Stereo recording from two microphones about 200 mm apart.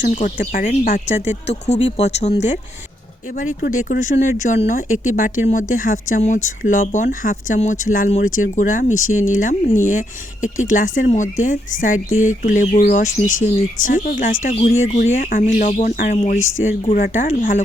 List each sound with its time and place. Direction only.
0.0 s speech: 40° left (ahead or behind)